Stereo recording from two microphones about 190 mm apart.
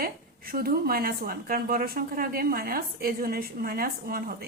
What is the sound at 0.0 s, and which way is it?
A woman's voice, 50° right (ahead or behind).